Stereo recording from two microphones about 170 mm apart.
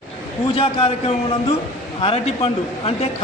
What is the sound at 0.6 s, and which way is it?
A man's voice, 35° left (ahead or behind).